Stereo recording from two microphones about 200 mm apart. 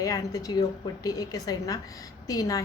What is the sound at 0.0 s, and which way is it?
A woman's voice, 20° left (ahead or behind).